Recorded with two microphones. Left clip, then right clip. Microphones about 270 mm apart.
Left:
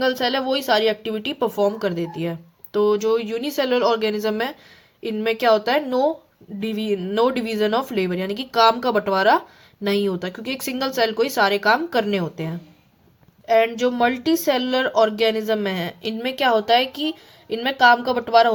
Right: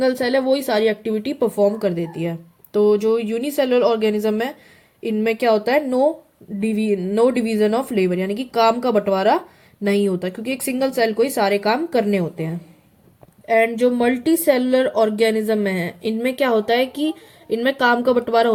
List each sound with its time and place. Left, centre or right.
0.0 s speech: centre